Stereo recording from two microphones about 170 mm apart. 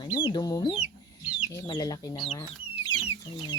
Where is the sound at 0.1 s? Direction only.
25° left (ahead or behind).